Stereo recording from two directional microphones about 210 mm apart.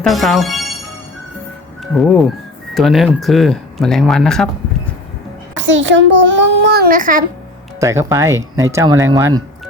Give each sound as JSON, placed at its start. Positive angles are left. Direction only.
{"t": 0.0, "sound": "speech", "side_deg": 0}
{"t": 1.8, "sound": "speech", "side_deg": 0}
{"t": 5.5, "sound": "a child's voice", "side_deg": -60}
{"t": 7.8, "sound": "speech", "side_deg": -15}